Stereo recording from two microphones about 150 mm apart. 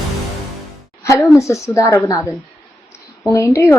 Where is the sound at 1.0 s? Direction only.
20° left (ahead or behind).